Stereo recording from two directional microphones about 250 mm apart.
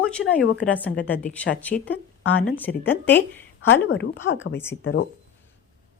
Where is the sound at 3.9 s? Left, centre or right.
Left.